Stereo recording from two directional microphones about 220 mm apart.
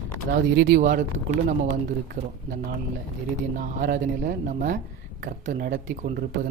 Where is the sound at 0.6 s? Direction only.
45° right (ahead or behind).